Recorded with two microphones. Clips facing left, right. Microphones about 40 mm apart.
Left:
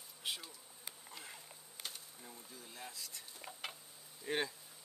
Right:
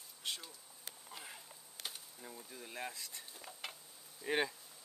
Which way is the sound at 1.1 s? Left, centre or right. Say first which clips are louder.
Right 3 dB; centre.